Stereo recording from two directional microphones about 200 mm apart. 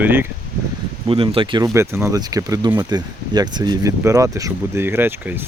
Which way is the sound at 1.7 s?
15° right (ahead or behind).